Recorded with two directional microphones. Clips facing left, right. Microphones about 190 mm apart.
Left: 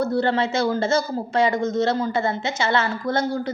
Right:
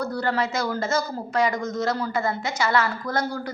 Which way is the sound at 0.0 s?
25° left (ahead or behind).